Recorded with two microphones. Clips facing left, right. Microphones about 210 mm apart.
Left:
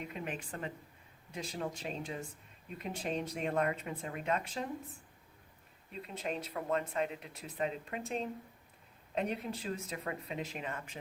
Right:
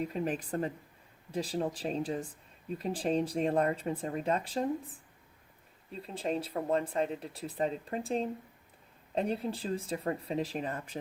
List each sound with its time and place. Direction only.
0.0 s speech: 35° right (ahead or behind)
5.9 s speech: 35° right (ahead or behind)